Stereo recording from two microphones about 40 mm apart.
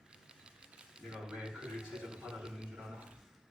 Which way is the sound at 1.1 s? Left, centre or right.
Right.